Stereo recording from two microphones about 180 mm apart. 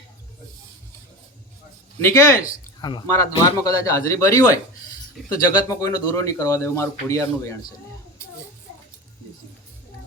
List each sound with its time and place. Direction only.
2.0 s a man's voice: 15° left (ahead or behind)
5.2 s a sound: centre (ahead or behind)
5.6 s a man's voice: 15° left (ahead or behind)